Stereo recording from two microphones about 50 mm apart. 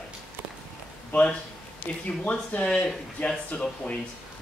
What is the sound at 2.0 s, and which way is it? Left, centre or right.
Speech, left.